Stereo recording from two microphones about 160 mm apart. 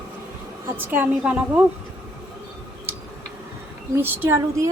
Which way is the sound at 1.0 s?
5° right (ahead or behind).